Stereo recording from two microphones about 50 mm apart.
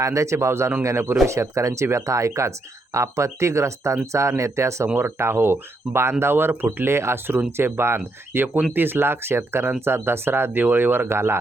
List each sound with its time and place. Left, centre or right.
0.0 s a man's voice: right
1.3 s speech: right
4.9 s speech: right